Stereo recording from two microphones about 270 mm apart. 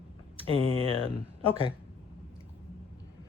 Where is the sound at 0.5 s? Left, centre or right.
Centre.